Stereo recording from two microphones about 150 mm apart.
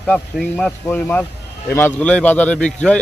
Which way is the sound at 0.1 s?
10° left (ahead or behind).